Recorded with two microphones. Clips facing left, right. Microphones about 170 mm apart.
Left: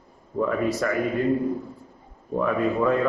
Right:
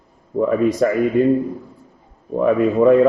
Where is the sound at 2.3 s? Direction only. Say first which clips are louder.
Right 7 dB; 20° right (ahead or behind).